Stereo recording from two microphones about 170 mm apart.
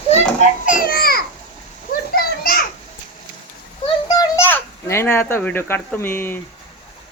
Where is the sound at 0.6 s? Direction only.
55° left (ahead or behind).